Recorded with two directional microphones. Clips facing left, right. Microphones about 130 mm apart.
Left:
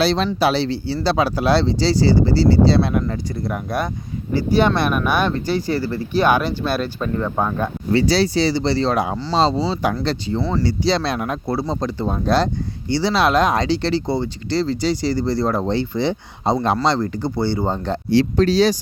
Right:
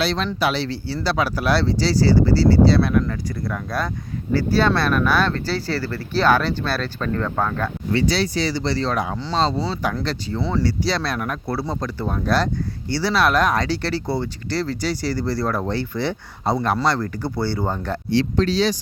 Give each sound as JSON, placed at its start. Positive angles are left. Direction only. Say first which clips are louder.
{"t": 0.0, "sound": "speech", "louder": "left 4 dB", "side_deg": 35}
{"t": 7.9, "sound": "speech", "louder": "left 4 dB", "side_deg": 35}
{"t": 9.1, "sound": "speech", "louder": "left 3 dB", "side_deg": 5}
{"t": 9.4, "sound": "speech", "louder": "left 4 dB", "side_deg": 30}
{"t": 18.1, "sound": "speech", "louder": "left 4 dB", "side_deg": 40}